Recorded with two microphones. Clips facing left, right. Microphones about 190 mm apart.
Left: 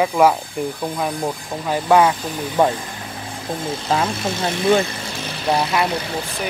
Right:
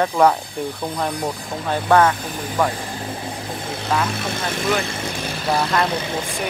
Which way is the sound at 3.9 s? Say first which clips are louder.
Left 2 dB; 25° left (ahead or behind).